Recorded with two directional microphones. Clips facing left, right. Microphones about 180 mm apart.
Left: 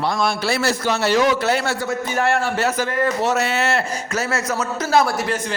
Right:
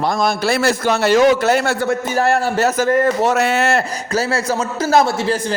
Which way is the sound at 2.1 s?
40° right (ahead or behind).